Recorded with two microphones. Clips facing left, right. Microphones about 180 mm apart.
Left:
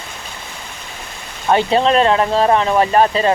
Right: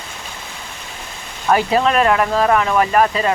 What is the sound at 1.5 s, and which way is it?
Speech, 25° left (ahead or behind).